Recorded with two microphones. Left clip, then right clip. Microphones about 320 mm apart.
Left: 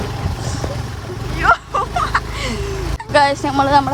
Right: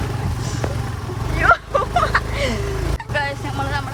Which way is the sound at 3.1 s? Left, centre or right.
Centre.